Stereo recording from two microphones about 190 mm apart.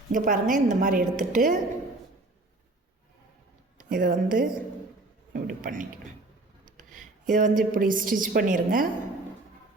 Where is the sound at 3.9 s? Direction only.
45° right (ahead or behind).